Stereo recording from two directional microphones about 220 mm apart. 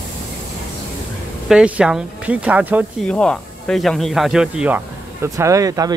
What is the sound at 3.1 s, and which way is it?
Speech, 5° left (ahead or behind).